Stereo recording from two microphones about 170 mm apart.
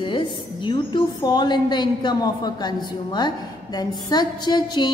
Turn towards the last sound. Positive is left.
turn(degrees=25)  # may be behind; listen again after turning